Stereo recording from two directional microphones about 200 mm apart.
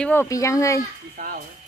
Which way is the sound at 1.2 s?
40° right (ahead or behind).